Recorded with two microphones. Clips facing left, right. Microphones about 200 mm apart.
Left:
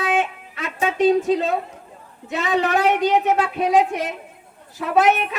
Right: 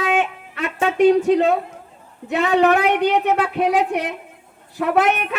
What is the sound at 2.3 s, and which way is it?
A woman's voice, 60° right (ahead or behind).